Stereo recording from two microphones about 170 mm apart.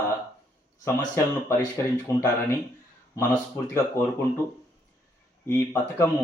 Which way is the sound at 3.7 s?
15° left (ahead or behind).